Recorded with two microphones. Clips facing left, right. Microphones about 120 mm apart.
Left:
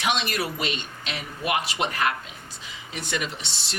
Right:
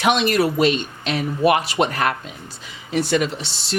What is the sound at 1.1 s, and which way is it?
Speech, 40° right (ahead or behind).